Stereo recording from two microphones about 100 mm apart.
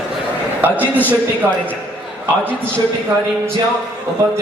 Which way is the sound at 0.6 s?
15° right (ahead or behind).